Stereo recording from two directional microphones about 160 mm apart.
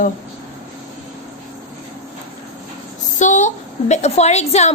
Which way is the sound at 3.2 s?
50° left (ahead or behind).